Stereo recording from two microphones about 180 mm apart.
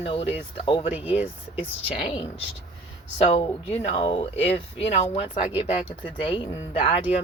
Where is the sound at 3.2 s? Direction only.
35° left (ahead or behind).